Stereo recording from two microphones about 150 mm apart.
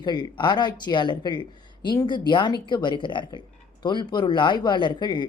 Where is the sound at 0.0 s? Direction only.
30° left (ahead or behind).